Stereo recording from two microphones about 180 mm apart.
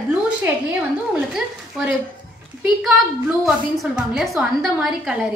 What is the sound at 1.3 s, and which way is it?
Speech, 5° right (ahead or behind).